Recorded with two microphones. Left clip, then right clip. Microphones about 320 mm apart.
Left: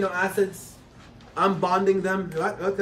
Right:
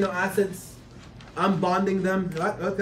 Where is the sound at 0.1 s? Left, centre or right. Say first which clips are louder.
Left 1 dB; centre.